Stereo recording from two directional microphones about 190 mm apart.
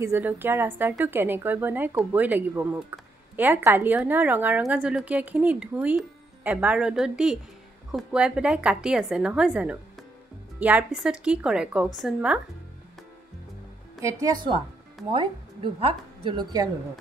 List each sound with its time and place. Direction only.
0.0 s a woman's voice: 10° right (ahead or behind)
15.1 s a woman's voice: 25° right (ahead or behind)